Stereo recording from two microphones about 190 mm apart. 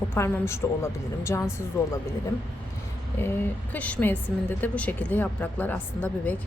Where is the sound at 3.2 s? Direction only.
10° left (ahead or behind).